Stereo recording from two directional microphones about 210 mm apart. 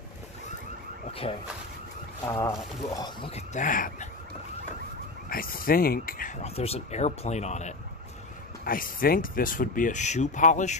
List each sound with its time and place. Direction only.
2.2 s speech: 15° left (ahead or behind); by 4.1 s 40° left (ahead or behind)
5.3 s speech: 45° left (ahead or behind)
6.4 s speech: 30° left (ahead or behind)
8.6 s speech: 45° left (ahead or behind)